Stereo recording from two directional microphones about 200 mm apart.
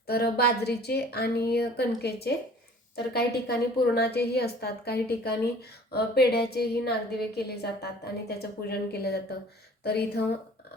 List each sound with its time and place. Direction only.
0.1 s a woman's voice: 50° left (ahead or behind)